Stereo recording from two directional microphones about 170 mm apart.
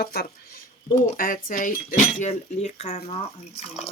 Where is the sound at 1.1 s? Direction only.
55° left (ahead or behind).